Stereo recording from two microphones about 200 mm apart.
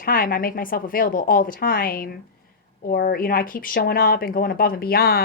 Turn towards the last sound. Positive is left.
turn(degrees=50)  # may be behind; listen again after turning